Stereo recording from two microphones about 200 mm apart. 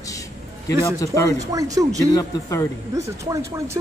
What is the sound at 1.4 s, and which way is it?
Speech, 15° right (ahead or behind).